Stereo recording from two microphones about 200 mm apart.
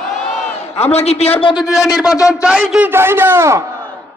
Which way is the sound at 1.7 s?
Centre (ahead or behind).